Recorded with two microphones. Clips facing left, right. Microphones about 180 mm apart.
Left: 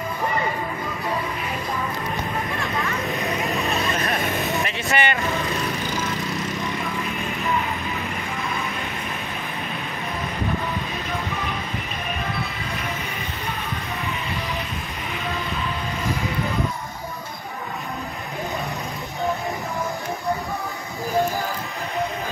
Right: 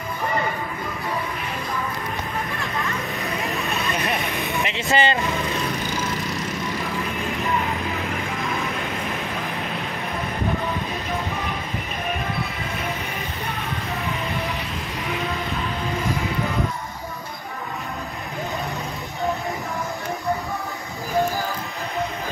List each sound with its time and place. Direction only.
2.6 s vehicle: centre (ahead or behind)
4.6 s vehicle: 20° right (ahead or behind)